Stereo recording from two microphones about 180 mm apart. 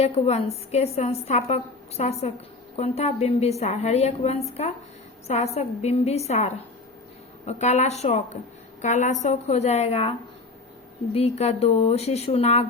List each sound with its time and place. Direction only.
0.0 s a woman's voice: 35° left (ahead or behind)